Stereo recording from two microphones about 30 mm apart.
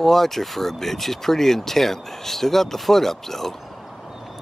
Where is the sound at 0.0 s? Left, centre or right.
Centre.